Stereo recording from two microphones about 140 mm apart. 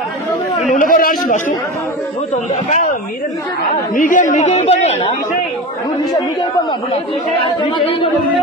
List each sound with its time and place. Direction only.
0.7 s speech: 85° left
2.3 s a man's voice: 65° left (ahead or behind)
7.4 s speech: 40° left (ahead or behind)